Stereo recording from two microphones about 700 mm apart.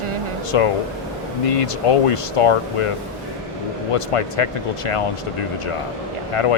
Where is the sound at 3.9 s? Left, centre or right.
Left.